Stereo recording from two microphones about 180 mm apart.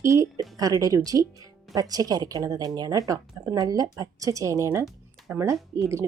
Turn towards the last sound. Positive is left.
turn(degrees=-15)  # may be behind; listen again after turning